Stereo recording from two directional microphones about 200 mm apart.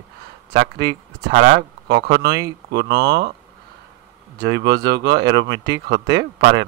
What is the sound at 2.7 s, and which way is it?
Speech, 55° right (ahead or behind).